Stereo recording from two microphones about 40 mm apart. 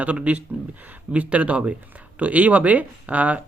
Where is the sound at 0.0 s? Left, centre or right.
Right.